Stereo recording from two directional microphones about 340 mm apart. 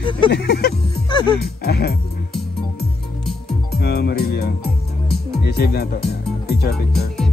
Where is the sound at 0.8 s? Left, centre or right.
Centre.